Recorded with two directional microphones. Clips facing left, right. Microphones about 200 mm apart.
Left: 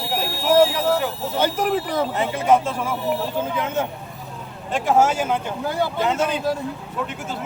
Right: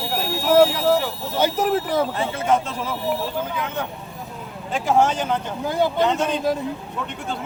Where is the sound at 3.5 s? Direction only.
25° left (ahead or behind).